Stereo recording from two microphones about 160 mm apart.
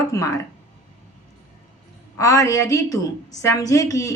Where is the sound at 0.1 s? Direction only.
20° left (ahead or behind).